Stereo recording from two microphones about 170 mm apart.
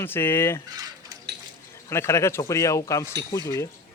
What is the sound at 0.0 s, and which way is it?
Speech, 15° left (ahead or behind).